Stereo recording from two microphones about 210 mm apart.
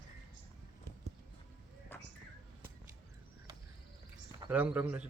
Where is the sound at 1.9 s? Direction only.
10° left (ahead or behind).